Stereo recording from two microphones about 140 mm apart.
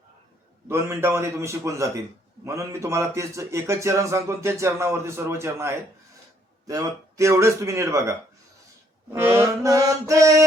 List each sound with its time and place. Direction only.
0.7 s a man's voice: 15° right (ahead or behind)
9.1 s a man's voice: 20° right (ahead or behind)